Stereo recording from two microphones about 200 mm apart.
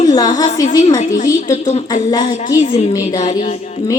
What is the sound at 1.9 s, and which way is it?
Speech, 20° left (ahead or behind).